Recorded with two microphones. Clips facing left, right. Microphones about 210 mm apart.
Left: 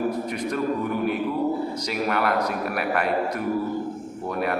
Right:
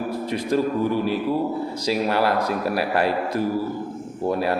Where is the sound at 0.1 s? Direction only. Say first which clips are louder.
Right 3 dB; 30° right (ahead or behind).